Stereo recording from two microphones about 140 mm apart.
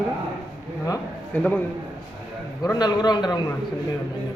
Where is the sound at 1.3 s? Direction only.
10° left (ahead or behind).